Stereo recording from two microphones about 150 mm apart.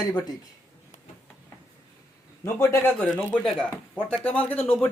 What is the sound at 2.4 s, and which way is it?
A man's voice, 15° left (ahead or behind).